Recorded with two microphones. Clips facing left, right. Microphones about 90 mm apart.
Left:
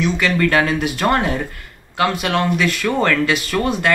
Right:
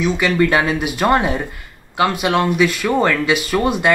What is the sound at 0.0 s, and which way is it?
Speech, 15° right (ahead or behind).